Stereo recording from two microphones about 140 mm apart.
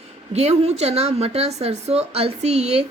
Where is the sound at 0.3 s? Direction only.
50° right (ahead or behind).